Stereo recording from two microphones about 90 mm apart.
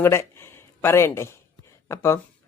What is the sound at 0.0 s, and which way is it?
Speech, 30° left (ahead or behind).